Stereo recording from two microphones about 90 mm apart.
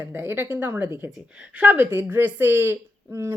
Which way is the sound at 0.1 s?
25° right (ahead or behind).